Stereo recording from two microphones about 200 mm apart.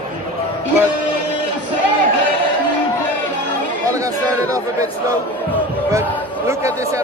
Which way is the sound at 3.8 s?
15° right (ahead or behind).